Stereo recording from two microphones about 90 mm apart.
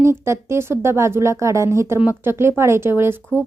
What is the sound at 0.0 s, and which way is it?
A woman's voice, 30° right (ahead or behind).